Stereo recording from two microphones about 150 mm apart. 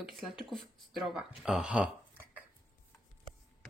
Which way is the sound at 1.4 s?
5° right (ahead or behind).